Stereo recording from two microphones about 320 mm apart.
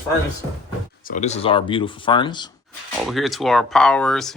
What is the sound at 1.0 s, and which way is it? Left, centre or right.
Speech, left.